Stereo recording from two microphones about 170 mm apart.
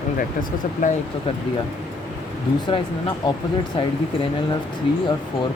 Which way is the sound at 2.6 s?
25° left (ahead or behind).